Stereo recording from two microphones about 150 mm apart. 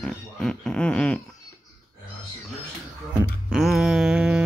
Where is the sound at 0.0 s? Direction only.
5° left (ahead or behind).